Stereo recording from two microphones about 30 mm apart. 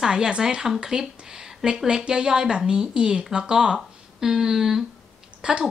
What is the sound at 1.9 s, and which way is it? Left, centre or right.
Speech, right.